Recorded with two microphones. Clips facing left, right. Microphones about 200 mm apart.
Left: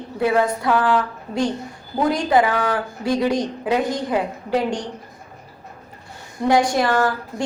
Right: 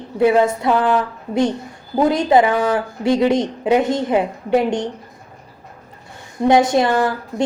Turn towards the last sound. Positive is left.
turn(degrees=-20)  # may be behind; listen again after turning